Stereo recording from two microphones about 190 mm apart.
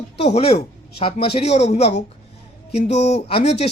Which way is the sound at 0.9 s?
30° left (ahead or behind).